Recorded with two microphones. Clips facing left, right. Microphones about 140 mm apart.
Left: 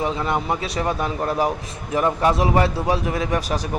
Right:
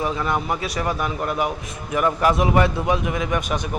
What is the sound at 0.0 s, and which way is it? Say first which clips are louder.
A man's voice: left 1 dB; 25° left (ahead or behind).